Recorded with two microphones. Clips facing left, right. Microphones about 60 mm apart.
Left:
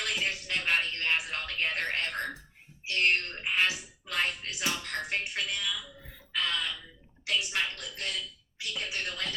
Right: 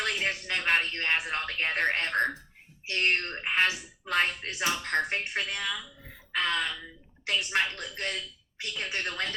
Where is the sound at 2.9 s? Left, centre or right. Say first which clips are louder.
Even; right.